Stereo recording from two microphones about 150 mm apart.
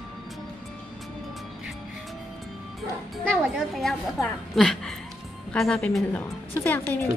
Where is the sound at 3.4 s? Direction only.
Centre (ahead or behind).